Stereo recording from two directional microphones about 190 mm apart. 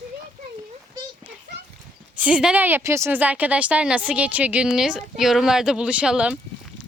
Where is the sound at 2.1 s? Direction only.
5° right (ahead or behind).